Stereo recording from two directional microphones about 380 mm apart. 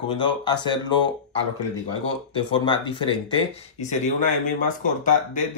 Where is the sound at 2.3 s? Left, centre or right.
Centre.